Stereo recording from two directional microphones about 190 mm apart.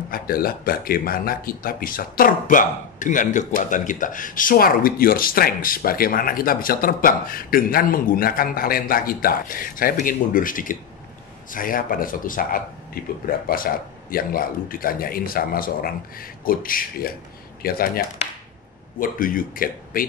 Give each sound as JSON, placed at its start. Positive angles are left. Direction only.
{"t": 0.1, "sound": "speech", "side_deg": 50}